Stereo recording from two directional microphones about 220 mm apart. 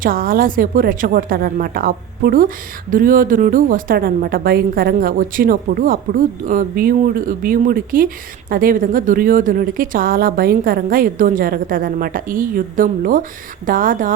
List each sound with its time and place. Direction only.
0.0 s a woman's voice: 40° right (ahead or behind)